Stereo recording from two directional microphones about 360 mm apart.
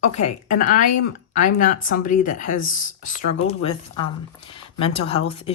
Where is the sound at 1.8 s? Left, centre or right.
Left.